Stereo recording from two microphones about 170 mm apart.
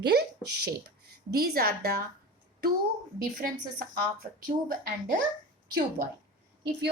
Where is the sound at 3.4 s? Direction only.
60° right (ahead or behind).